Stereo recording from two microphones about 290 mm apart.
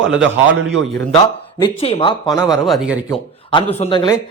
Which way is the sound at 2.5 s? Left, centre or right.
Centre.